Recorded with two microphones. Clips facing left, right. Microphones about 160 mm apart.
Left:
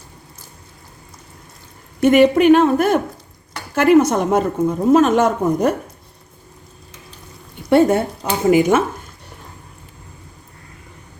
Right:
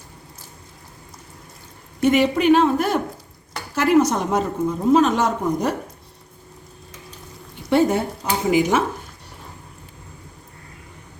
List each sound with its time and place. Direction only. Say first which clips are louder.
2.0 s a woman's voice: left 6 dB; 50° left (ahead or behind)
7.7 s a woman's voice: left 4 dB; 55° left (ahead or behind)